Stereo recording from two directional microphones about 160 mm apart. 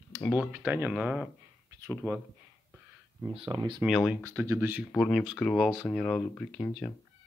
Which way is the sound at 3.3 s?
35° right (ahead or behind).